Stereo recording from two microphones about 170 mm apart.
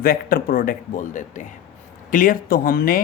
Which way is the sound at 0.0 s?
60° left (ahead or behind).